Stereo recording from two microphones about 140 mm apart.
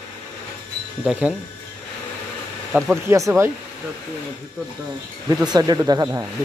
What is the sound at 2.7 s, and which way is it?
Speech, 20° right (ahead or behind).